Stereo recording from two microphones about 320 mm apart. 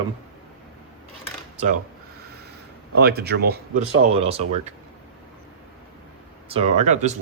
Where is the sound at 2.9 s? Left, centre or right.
Right.